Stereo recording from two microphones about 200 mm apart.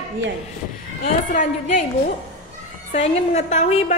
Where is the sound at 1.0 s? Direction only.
40° left (ahead or behind).